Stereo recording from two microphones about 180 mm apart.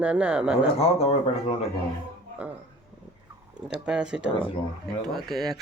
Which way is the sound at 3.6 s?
5° right (ahead or behind).